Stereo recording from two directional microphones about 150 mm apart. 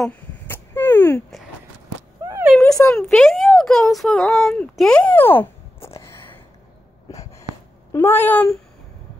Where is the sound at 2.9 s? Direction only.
5° left (ahead or behind).